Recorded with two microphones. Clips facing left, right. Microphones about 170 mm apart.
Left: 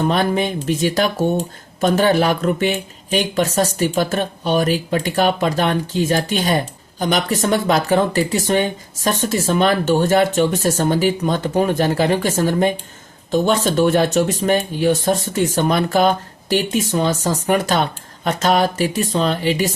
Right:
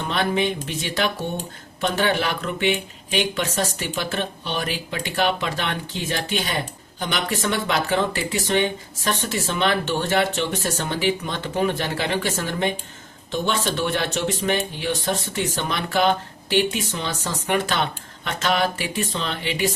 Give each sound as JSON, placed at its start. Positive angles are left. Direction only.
{"t": 0.0, "sound": "speech", "side_deg": 40}